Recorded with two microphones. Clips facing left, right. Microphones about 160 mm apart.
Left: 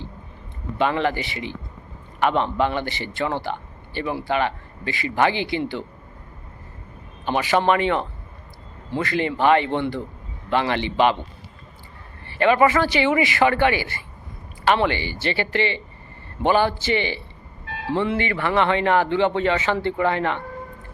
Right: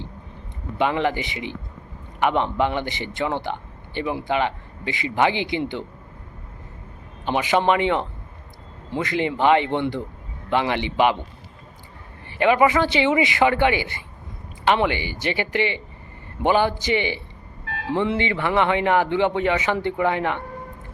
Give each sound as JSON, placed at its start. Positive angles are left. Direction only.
{"t": 0.8, "sound": "a man's voice", "side_deg": -15}
{"t": 7.3, "sound": "a man's voice", "side_deg": -15}